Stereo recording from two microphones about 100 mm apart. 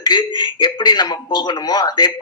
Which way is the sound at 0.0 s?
50° left (ahead or behind).